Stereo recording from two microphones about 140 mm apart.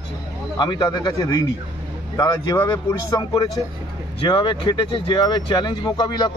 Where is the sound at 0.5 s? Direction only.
30° left (ahead or behind).